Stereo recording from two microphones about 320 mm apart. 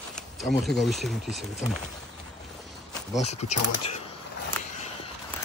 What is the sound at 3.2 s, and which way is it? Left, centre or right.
Speech, centre.